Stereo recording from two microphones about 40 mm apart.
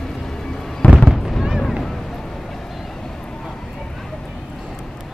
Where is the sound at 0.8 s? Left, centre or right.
Left.